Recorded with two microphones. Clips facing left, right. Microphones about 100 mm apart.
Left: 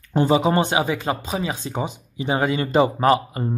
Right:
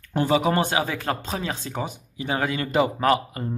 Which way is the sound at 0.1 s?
25° left (ahead or behind).